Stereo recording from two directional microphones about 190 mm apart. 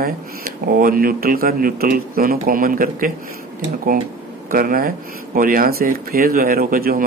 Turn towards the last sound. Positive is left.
turn(degrees=-50)  # may be behind; listen again after turning